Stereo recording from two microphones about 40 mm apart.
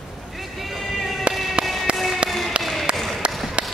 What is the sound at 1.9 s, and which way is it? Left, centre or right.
Tap, right.